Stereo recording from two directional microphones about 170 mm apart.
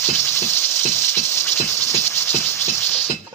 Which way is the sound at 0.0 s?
15° left (ahead or behind).